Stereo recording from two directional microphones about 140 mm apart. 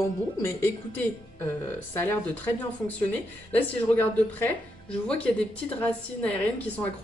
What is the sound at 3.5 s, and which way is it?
A woman's voice, 10° left (ahead or behind).